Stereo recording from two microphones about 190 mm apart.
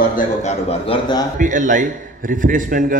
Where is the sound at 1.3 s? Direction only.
40° right (ahead or behind).